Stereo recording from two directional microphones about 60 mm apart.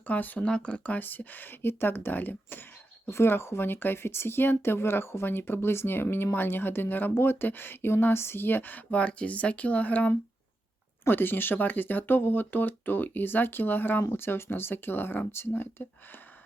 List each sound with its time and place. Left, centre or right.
0.1 s speech: left
0.4 s speech: centre
0.9 s speech: left
3.1 s speech: left
11.0 s speech: left